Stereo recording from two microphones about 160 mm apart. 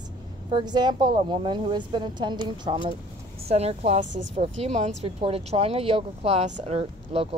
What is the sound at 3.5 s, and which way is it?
Speech, 40° right (ahead or behind).